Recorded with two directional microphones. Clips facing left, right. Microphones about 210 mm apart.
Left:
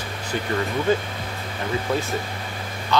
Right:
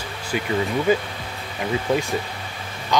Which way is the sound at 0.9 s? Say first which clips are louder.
Right 1 dB; 10° right (ahead or behind).